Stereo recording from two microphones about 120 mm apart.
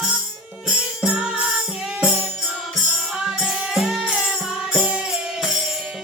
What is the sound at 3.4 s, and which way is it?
Music, 5° right (ahead or behind).